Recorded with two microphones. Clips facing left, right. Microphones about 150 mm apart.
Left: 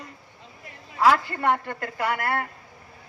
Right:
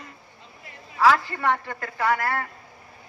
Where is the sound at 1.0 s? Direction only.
50° left (ahead or behind).